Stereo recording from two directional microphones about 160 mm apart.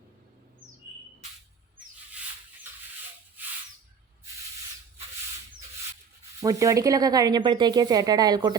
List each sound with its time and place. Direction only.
6.4 s speech: 20° right (ahead or behind)